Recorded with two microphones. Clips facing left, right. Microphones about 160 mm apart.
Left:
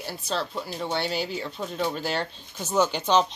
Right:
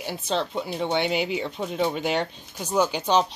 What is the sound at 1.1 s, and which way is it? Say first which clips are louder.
Speech: right 4 dB; 65° right (ahead or behind).